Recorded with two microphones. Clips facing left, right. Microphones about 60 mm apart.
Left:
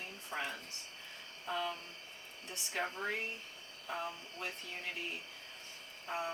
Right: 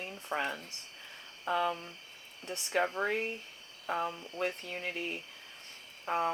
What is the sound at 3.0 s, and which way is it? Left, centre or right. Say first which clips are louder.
Speech: right 6 dB; right.